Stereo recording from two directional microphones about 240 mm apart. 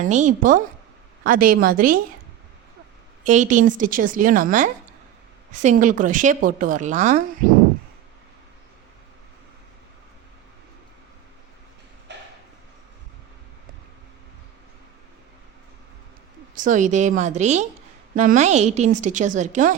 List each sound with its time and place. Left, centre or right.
0.0 s speech: right
3.2 s speech: right
12.1 s a sound: right
16.6 s a woman's voice: right